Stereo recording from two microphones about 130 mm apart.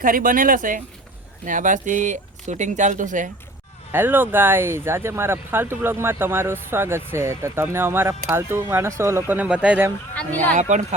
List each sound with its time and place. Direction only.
0.0 s speech: 90° right
3.9 s speech: 15° right (ahead or behind)
10.2 s speech: 10° left (ahead or behind)
10.5 s speech: 70° right (ahead or behind)